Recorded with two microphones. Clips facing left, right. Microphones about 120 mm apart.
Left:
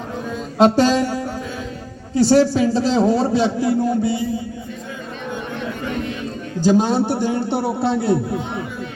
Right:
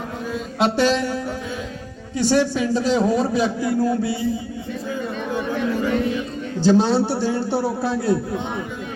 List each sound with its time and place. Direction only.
0.6 s a man's voice: 40° left (ahead or behind); by 4.2 s 25° left (ahead or behind)
6.7 s a man's voice: 15° left (ahead or behind)